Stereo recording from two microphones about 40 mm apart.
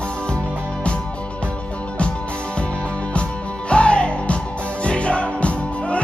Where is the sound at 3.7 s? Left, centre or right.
Left.